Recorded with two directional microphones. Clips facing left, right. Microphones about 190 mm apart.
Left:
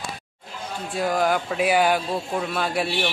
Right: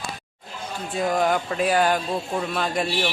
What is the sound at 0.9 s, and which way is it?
Speech, centre (ahead or behind).